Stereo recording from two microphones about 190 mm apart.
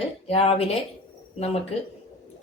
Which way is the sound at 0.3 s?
30° left (ahead or behind).